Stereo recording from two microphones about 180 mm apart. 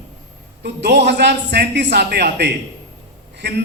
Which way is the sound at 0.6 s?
70° right (ahead or behind).